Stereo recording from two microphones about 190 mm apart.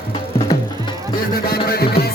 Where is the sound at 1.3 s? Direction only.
55° left (ahead or behind).